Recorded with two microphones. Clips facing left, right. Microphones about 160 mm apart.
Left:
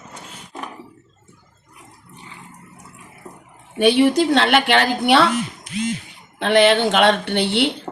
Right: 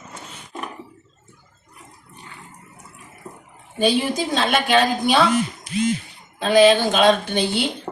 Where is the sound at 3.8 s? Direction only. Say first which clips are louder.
Left 5 dB; 70° left (ahead or behind).